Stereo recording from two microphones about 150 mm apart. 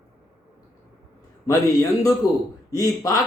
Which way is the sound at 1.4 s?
20° left (ahead or behind).